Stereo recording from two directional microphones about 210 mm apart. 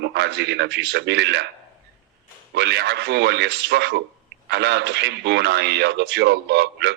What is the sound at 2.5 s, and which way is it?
A man's voice, 55° right (ahead or behind).